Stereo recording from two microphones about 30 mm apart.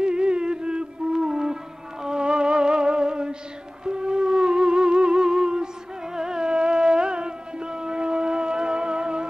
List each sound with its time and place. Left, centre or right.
0.0 s music: right